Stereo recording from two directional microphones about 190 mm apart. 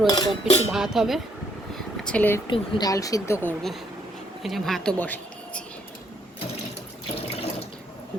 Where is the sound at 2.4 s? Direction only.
25° left (ahead or behind).